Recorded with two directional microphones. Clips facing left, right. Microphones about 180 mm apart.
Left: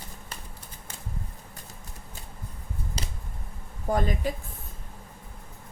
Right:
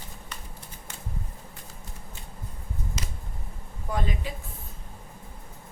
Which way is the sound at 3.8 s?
45° left (ahead or behind).